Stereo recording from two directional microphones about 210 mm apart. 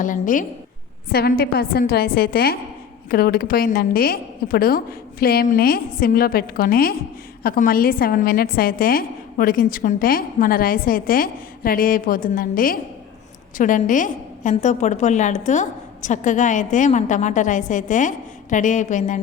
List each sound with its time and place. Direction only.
0.0 s a woman's voice: 40° left (ahead or behind)